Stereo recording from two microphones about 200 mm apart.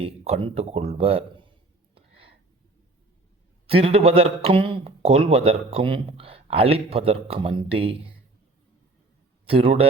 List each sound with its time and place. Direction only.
0.0 s a man's voice: 25° right (ahead or behind)
3.7 s a man's voice: 30° right (ahead or behind)
9.5 s a man's voice: 30° right (ahead or behind)